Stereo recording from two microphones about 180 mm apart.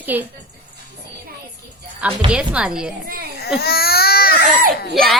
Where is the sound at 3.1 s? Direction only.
60° right (ahead or behind).